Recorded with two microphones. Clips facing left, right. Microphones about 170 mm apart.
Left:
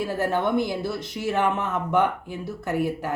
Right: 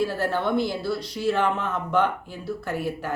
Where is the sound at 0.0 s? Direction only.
15° left (ahead or behind).